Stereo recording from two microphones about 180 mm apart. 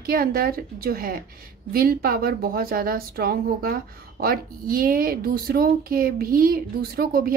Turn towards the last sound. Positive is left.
turn(degrees=-55)  # may be behind; listen again after turning